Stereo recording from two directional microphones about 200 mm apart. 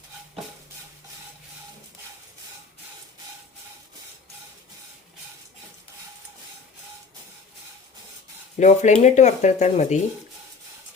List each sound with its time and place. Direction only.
8.5 s speech: 35° left (ahead or behind)